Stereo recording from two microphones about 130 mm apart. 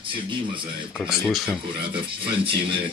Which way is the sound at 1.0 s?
Centre (ahead or behind).